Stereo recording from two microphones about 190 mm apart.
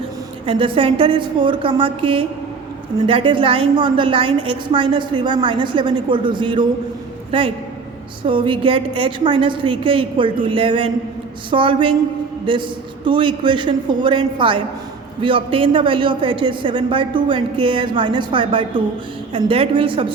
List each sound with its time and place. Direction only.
0.4 s a woman's voice: 25° right (ahead or behind)